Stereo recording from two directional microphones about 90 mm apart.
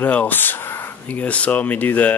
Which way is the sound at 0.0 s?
15° left (ahead or behind).